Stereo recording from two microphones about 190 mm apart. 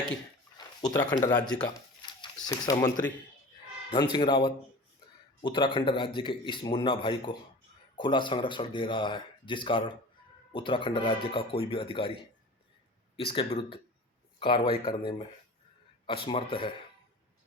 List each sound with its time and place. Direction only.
0.5 s a sound: 20° left (ahead or behind)
1.1 s a man's voice: 20° left (ahead or behind)
3.9 s a man's voice: 25° left (ahead or behind)
13.1 s a man's voice: 30° left (ahead or behind)
16.0 s a man's voice: 30° left (ahead or behind)